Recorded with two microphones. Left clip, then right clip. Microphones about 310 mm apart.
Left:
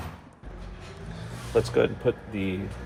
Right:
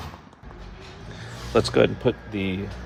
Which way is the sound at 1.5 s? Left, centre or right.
Right.